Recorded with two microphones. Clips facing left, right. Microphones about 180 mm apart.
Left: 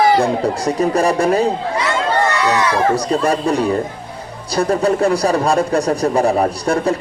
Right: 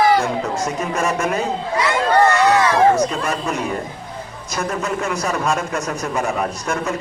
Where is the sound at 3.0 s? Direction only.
35° left (ahead or behind).